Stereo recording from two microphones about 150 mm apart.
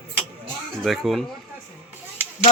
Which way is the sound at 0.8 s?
Centre (ahead or behind).